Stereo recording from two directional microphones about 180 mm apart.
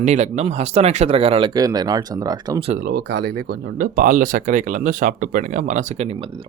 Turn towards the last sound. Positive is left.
turn(degrees=-30)  # may be behind; listen again after turning